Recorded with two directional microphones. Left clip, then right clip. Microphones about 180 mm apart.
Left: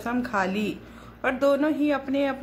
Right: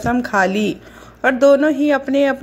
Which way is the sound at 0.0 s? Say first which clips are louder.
Right 10 dB; 35° right (ahead or behind).